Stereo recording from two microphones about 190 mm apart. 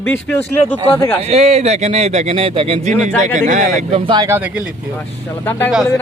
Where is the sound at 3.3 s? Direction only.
40° right (ahead or behind); by 4.3 s 25° right (ahead or behind).